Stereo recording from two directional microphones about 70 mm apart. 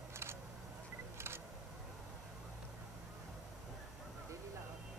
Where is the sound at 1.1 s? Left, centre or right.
Right.